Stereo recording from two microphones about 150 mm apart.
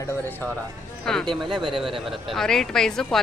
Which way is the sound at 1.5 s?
30° right (ahead or behind).